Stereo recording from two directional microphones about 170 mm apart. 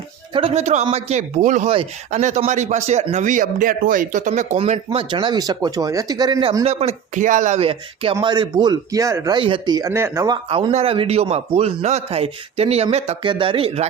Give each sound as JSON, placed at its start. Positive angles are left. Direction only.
{"t": 0.3, "sound": "a man's voice", "side_deg": -35}
{"t": 6.7, "sound": "a man's voice", "side_deg": -40}
{"t": 10.3, "sound": "a man's voice", "side_deg": -25}
{"t": 10.7, "sound": "a man's voice", "side_deg": -35}